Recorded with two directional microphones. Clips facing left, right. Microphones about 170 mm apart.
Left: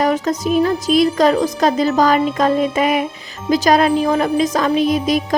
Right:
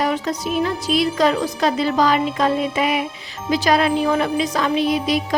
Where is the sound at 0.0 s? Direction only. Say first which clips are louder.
Left 4 dB; 45° left (ahead or behind).